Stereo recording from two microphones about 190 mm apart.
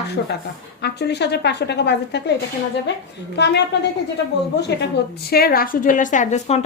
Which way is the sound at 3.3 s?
65° left (ahead or behind).